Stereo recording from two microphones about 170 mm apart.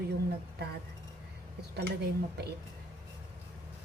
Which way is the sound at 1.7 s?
65° right (ahead or behind).